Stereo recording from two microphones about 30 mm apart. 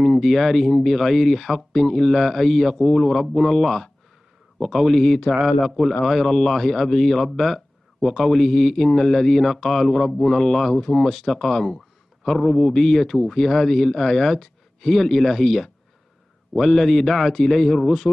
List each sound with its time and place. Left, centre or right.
0.0 s speech: centre
5.3 s a man's voice: left
6.0 s speech: centre
11.1 s speech: centre
11.3 s speech: centre